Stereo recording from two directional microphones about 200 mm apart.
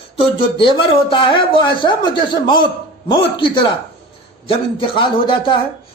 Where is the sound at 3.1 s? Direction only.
25° left (ahead or behind).